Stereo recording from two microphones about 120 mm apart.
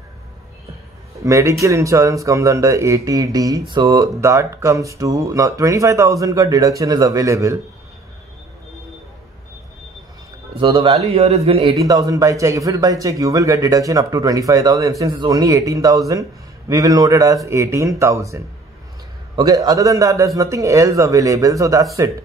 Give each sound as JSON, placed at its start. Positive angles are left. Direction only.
{"t": 1.2, "sound": "speech", "side_deg": -25}
{"t": 10.5, "sound": "a man's voice", "side_deg": -50}
{"t": 11.7, "sound": "speech", "side_deg": -30}